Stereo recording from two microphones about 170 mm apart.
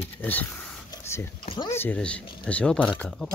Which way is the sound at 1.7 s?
10° left (ahead or behind).